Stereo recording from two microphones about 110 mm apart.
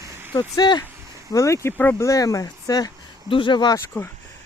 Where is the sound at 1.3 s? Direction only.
30° left (ahead or behind).